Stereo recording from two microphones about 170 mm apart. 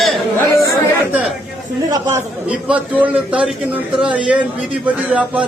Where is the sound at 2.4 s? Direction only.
10° right (ahead or behind).